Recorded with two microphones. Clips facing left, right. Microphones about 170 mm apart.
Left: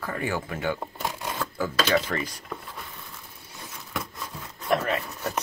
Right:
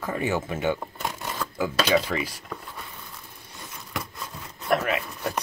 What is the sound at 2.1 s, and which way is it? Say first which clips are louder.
Speech: right 1 dB; 5° right (ahead or behind).